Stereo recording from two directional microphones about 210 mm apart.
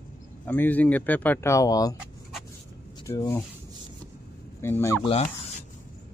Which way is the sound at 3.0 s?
15° left (ahead or behind).